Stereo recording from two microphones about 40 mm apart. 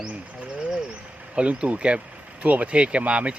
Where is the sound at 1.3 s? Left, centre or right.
Right.